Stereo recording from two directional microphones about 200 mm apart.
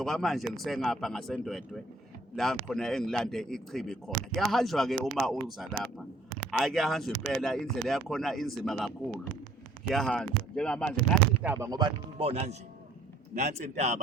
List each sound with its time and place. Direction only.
0.0 s speech: centre (ahead or behind)
11.4 s a man's voice: 15° right (ahead or behind); by 14.0 s 35° right (ahead or behind)